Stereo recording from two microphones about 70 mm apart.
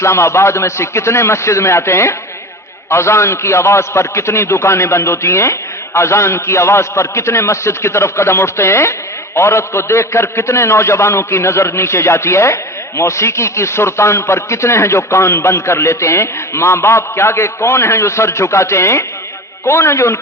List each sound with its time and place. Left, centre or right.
0.0 s a man's voice: left